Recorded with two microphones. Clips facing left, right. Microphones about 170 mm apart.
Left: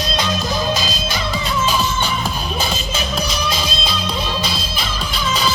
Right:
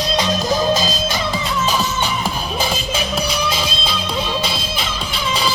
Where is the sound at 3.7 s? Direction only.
25° right (ahead or behind).